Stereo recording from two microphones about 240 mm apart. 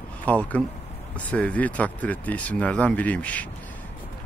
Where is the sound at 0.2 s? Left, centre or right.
Centre.